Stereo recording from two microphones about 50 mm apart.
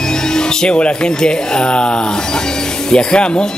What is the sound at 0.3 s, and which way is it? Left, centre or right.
Speech, centre.